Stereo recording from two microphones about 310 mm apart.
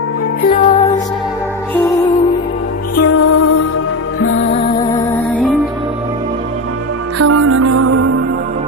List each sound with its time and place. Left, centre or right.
0.4 s music: left
2.9 s music: left
7.2 s music: right